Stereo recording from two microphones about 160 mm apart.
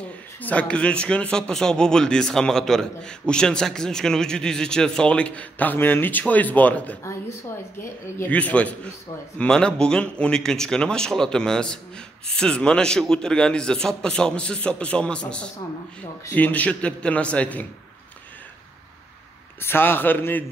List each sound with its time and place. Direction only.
0.4 s a man's voice: 10° left (ahead or behind)
19.6 s a man's voice: 15° left (ahead or behind)